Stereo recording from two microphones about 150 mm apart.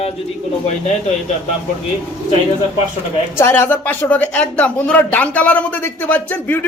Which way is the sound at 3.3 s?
15° left (ahead or behind).